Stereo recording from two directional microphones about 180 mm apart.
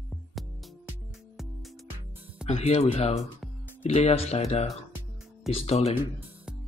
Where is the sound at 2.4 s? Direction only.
35° left (ahead or behind).